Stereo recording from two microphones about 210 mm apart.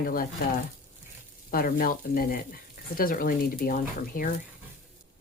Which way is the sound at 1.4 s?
45° left (ahead or behind).